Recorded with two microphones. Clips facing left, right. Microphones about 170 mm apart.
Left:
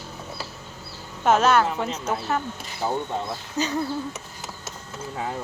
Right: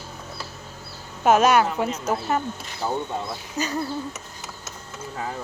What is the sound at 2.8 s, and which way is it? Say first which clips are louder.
Speech: even; 15° left (ahead or behind).